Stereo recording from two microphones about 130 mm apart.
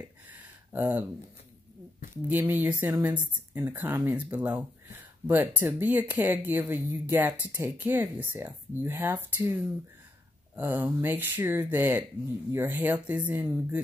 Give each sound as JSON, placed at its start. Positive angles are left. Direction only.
{"t": 0.3, "sound": "a sound", "side_deg": -15}
{"t": 2.2, "sound": "speech", "side_deg": -15}
{"t": 10.5, "sound": "speech", "side_deg": -15}